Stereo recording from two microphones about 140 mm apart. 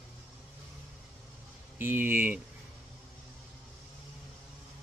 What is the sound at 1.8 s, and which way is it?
Speech, 15° right (ahead or behind).